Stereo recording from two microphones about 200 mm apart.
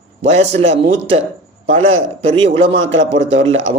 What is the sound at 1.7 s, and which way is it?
Speech, 90° right.